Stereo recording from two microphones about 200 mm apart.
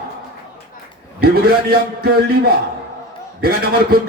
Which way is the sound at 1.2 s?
50° right (ahead or behind).